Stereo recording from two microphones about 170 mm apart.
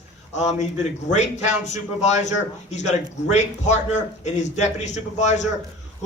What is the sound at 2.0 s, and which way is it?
A man's voice, 45° left (ahead or behind).